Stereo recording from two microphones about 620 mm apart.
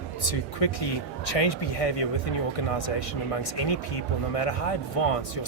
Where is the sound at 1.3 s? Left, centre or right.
Left.